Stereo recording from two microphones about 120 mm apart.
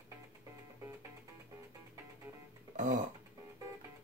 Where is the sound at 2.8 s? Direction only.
90° right.